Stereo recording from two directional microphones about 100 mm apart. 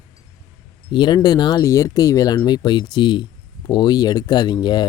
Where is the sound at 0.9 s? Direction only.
45° left (ahead or behind).